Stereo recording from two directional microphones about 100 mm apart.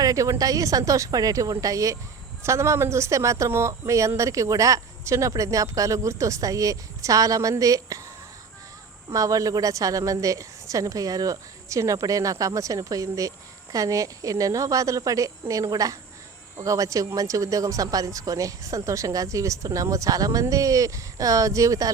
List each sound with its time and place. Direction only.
0.0 s speech: 35° right (ahead or behind)
9.1 s speech: 35° right (ahead or behind)